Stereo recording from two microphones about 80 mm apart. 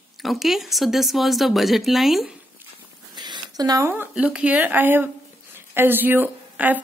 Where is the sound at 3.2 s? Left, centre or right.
Right.